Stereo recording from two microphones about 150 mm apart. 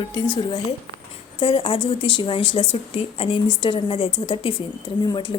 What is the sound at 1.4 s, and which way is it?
Speech, 40° left (ahead or behind).